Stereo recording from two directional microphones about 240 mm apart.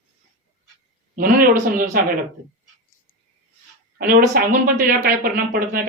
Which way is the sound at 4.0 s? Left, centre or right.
Right.